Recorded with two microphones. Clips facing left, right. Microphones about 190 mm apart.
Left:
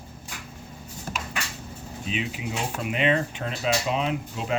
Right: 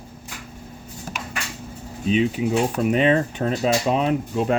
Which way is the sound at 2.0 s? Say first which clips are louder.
Right 11 dB; 40° right (ahead or behind).